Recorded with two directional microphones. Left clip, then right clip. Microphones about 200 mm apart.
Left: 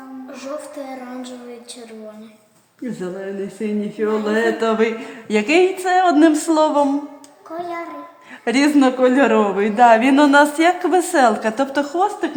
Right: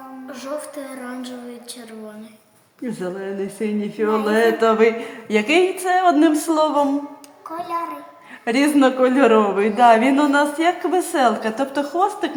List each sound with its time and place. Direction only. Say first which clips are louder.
2.8 s speech: even; 10° left (ahead or behind)
8.4 s speech: left 1 dB; 25° left (ahead or behind)